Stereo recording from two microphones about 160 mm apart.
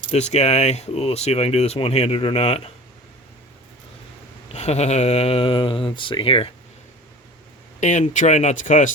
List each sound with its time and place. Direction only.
0.1 s speech: 45° left (ahead or behind)
4.5 s speech: 40° left (ahead or behind)
7.8 s speech: 50° left (ahead or behind)